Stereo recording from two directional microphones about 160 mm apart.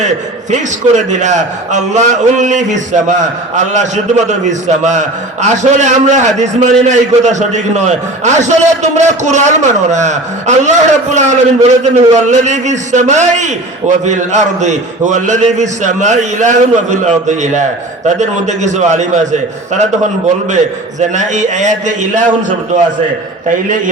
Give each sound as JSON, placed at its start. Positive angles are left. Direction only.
{"t": 0.5, "sound": "a man's voice", "side_deg": -50}